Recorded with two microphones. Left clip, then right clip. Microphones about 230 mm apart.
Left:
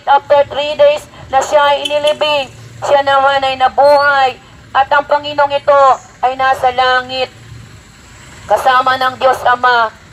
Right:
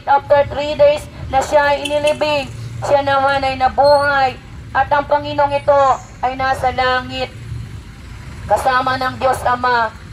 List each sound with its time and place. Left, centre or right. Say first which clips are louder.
0.0 s a woman's voice: left 3 dB; left
8.5 s a woman's voice: left 5 dB; left